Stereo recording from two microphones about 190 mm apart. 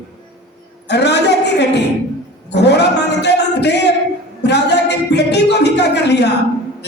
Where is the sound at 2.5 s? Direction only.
65° left (ahead or behind).